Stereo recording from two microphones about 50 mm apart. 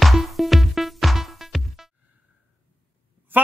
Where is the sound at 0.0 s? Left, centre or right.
Centre.